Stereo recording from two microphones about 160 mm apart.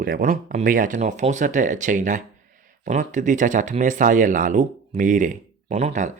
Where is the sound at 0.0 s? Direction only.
55° right (ahead or behind).